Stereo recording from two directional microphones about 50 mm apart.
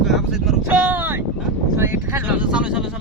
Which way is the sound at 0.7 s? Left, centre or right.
Right.